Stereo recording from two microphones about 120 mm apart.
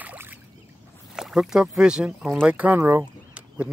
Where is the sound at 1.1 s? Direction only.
Centre (ahead or behind).